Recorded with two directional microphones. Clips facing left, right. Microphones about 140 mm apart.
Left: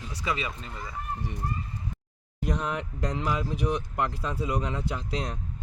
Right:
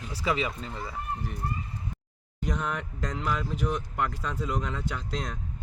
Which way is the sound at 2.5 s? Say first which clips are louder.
Left 1 dB; 5° left (ahead or behind).